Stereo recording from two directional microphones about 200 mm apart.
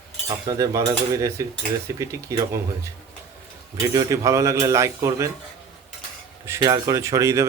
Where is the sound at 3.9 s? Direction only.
15° right (ahead or behind).